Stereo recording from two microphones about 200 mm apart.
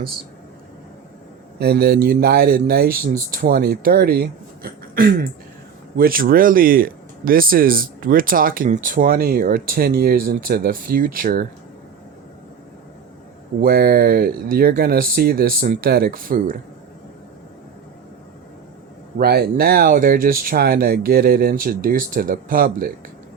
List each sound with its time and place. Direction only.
1.5 s speech: 55° right (ahead or behind)
13.6 s speech: 50° right (ahead or behind)
19.2 s speech: 50° right (ahead or behind)